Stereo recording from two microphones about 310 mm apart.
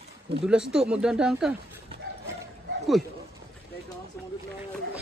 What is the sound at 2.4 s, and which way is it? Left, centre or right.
Bow-wow, centre.